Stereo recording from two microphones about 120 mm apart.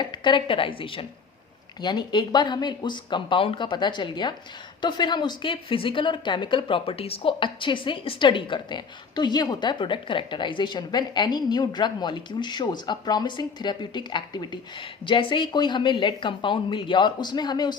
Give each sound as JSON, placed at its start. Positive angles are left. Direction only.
{"t": 0.0, "sound": "a woman's voice", "side_deg": 40}
{"t": 1.8, "sound": "a woman's voice", "side_deg": 35}